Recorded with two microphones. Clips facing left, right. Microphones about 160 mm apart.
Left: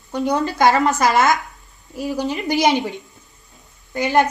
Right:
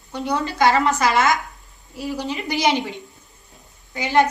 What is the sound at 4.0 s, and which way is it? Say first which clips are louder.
Speech: left 1 dB; 45° left (ahead or behind).